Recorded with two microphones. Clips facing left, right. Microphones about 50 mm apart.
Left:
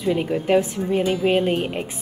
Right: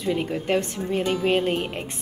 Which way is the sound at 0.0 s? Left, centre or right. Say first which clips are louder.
Left 4 dB; centre.